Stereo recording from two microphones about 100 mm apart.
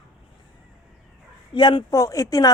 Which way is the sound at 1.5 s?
50° left (ahead or behind).